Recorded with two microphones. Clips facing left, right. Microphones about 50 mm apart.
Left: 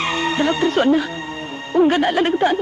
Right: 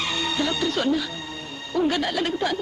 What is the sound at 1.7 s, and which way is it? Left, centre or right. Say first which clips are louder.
Speech: left 8 dB; left.